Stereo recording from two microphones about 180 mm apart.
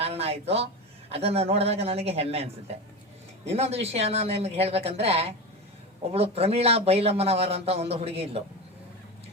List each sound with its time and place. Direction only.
0.0 s a woman's voice: 35° right (ahead or behind)
3.5 s a man's voice: 35° right (ahead or behind)